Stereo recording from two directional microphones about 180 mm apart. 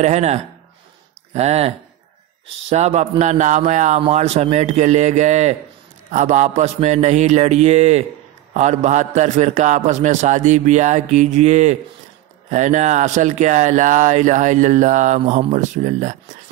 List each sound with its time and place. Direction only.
0.0 s a man's voice: 40° right (ahead or behind)
2.7 s a man's voice: 40° right (ahead or behind)